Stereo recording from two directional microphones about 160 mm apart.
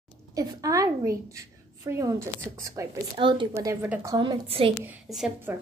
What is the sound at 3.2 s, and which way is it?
Speech, 30° right (ahead or behind).